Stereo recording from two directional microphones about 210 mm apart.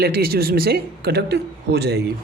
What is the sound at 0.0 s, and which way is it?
Speech, 45° right (ahead or behind).